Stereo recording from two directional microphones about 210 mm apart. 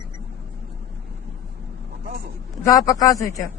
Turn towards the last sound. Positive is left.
turn(degrees=15)  # may be behind; listen again after turning